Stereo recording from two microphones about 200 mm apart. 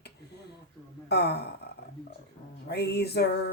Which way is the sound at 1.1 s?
55° left (ahead or behind).